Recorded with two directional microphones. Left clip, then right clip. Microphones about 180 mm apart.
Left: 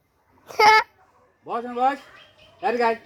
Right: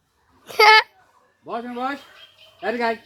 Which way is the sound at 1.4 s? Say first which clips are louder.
Left 5 dB; 15° left (ahead or behind).